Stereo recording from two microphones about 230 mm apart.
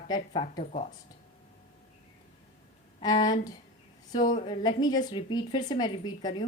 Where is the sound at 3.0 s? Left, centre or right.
Centre.